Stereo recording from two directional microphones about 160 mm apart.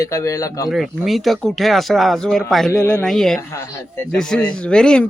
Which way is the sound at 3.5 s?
15° left (ahead or behind).